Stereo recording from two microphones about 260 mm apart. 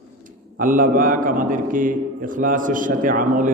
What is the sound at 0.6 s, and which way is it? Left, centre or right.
A man's voice, right.